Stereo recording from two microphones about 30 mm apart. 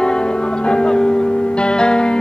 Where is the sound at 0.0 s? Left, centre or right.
Left.